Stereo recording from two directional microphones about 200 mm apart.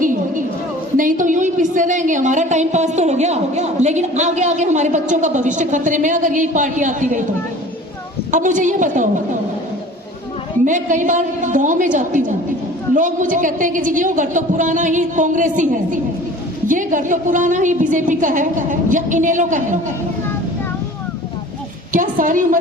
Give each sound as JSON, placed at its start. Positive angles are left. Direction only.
{"t": 0.0, "sound": "a sound", "side_deg": -40}
{"t": 0.9, "sound": "a woman's voice", "side_deg": -40}
{"t": 8.3, "sound": "a woman's voice", "side_deg": -40}
{"t": 10.7, "sound": "a woman's voice", "side_deg": -40}
{"t": 21.9, "sound": "a woman's voice", "side_deg": -40}